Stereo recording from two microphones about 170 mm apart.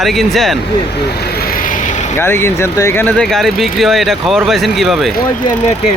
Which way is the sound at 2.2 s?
15° left (ahead or behind).